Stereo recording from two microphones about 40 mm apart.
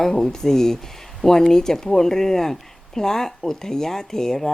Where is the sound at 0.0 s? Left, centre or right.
Centre.